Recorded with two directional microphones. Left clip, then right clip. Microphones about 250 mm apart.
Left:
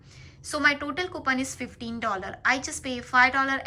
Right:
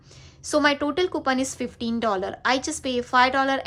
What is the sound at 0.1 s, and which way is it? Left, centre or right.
A woman's voice, centre.